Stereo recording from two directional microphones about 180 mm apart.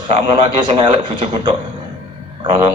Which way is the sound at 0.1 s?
30° right (ahead or behind).